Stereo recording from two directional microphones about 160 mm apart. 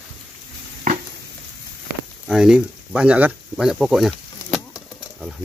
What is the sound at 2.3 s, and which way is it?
Speech, 5° right (ahead or behind).